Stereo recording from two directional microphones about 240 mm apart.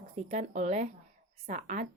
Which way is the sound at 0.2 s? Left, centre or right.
Right.